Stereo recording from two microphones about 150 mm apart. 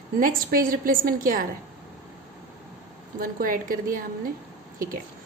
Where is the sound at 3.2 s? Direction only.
70° right (ahead or behind).